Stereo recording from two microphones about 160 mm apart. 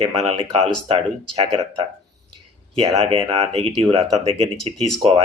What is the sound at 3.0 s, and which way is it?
Speech, 40° right (ahead or behind).